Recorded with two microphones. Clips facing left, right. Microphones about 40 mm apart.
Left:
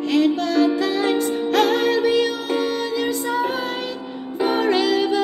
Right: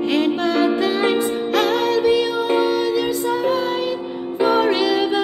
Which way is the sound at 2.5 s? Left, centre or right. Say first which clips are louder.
Right 7 dB; centre.